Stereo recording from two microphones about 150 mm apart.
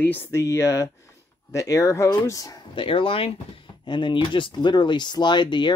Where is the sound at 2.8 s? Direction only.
35° left (ahead or behind).